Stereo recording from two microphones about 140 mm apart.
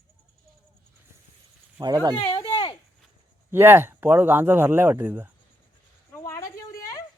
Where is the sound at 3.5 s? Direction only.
15° right (ahead or behind).